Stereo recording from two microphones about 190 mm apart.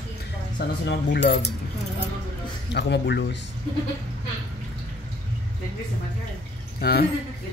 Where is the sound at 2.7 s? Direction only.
65° left (ahead or behind).